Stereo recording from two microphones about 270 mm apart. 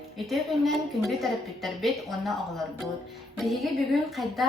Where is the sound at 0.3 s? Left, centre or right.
Centre.